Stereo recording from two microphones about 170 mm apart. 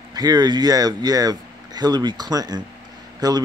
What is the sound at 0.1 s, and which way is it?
Speech, 25° right (ahead or behind).